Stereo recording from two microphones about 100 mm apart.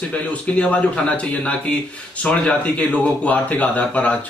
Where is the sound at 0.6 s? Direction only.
15° left (ahead or behind).